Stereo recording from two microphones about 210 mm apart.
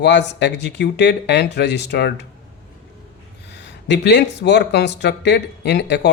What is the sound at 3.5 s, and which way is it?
A man's voice, 55° left (ahead or behind).